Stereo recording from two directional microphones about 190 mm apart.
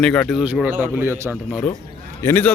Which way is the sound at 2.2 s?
10° left (ahead or behind).